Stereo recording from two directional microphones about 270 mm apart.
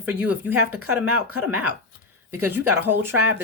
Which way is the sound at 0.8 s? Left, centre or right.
Right.